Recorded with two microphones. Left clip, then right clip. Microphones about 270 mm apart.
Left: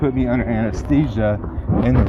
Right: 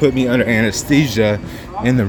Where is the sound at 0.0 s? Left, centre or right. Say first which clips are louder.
Right 6 dB; centre.